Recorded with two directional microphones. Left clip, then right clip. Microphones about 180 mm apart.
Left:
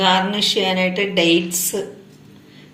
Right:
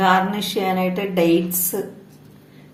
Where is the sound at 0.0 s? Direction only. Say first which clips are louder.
Left 1 dB; 55° right (ahead or behind).